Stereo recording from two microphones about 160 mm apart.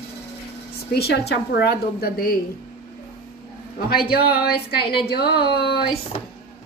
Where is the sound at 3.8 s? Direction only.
70° left (ahead or behind).